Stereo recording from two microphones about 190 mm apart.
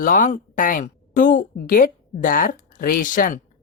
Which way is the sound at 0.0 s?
45° left (ahead or behind).